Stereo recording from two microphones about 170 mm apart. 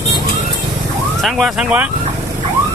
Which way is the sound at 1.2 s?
Centre (ahead or behind).